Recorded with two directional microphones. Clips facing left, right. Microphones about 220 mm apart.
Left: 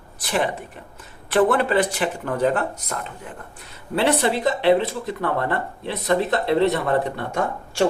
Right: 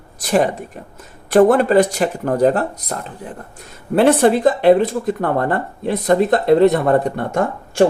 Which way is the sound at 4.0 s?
50° right (ahead or behind).